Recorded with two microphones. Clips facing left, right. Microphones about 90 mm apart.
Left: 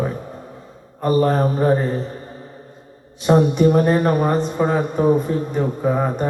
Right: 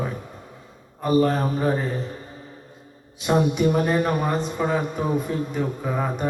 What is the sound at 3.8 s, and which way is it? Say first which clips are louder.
A man's voice: left 5 dB; 10° left (ahead or behind).